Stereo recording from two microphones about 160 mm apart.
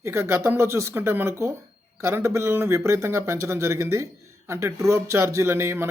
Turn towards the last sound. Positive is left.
turn(degrees=-15)  # may be behind; listen again after turning